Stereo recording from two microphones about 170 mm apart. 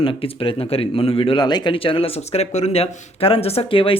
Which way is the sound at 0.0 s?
30° left (ahead or behind).